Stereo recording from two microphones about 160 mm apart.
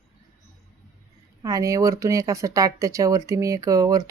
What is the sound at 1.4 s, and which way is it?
Speech, 20° right (ahead or behind).